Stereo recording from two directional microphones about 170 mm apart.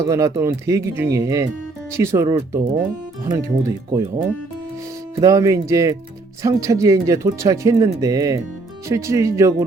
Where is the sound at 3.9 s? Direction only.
15° right (ahead or behind).